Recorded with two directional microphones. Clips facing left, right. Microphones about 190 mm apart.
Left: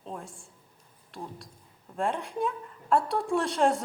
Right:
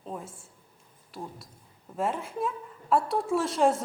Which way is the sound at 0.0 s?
5° right (ahead or behind).